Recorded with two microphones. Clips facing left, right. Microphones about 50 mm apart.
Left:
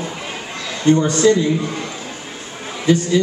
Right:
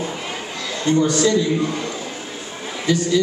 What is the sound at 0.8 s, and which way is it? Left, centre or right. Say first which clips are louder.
Speech: left 3 dB; left.